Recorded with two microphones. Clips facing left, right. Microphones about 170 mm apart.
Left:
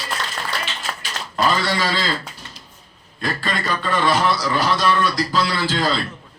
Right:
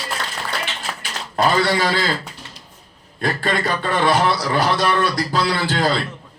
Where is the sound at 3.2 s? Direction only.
60° right (ahead or behind).